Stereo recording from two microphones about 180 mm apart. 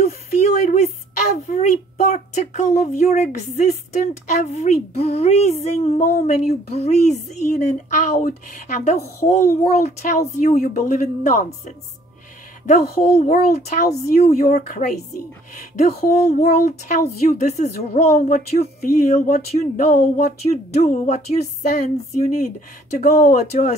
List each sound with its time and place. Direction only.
0.6 s speech: 40° left (ahead or behind)
14.4 s speech: 50° left (ahead or behind)